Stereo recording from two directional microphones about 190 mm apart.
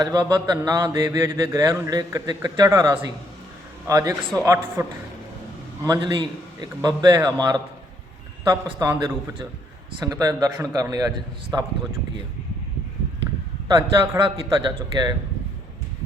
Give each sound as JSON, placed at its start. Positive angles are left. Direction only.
{"t": 0.0, "sound": "a man's voice", "side_deg": -20}
{"t": 8.6, "sound": "a man's voice", "side_deg": -20}
{"t": 13.7, "sound": "a man's voice", "side_deg": -20}